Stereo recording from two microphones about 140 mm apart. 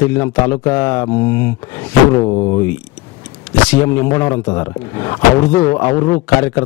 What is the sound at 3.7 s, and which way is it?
A man's voice, 15° left (ahead or behind).